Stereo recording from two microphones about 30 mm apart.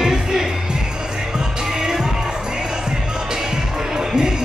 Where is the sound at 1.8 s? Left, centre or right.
Right.